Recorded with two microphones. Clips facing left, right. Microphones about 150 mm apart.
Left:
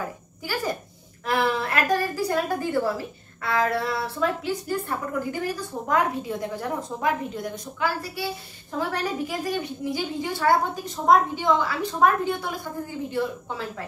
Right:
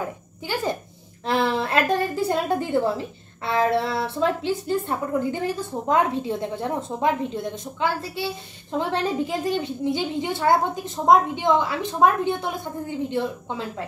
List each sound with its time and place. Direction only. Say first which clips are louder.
0.4 s a child's voice: right 2 dB; 25° right (ahead or behind)